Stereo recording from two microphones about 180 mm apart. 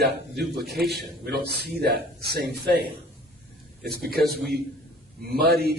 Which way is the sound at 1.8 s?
60° right (ahead or behind).